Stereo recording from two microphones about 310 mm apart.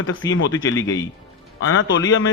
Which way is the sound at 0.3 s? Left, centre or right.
Left.